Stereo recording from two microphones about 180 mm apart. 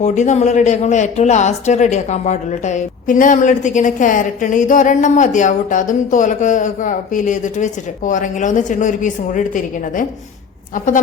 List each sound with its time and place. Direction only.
0.0 s speech: 40° left (ahead or behind)